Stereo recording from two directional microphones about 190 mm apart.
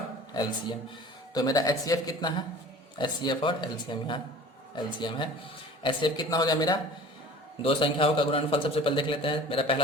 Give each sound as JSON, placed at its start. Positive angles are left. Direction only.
{"t": 1.3, "sound": "a man's voice", "side_deg": 20}